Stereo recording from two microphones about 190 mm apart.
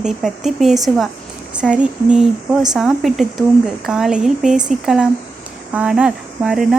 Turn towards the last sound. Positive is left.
turn(degrees=-5)  # may be behind; listen again after turning